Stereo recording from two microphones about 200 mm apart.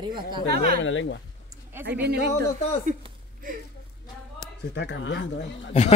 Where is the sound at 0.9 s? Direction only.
70° left (ahead or behind).